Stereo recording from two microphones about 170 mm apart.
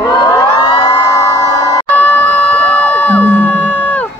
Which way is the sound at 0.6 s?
20° left (ahead or behind).